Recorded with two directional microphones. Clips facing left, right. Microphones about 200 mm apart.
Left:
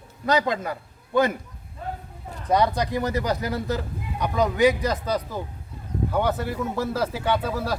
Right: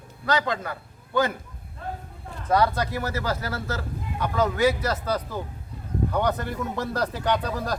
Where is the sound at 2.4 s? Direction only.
15° left (ahead or behind).